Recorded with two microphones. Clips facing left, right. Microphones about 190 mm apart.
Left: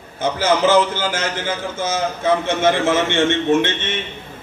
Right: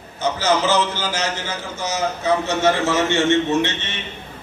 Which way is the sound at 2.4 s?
50° left (ahead or behind).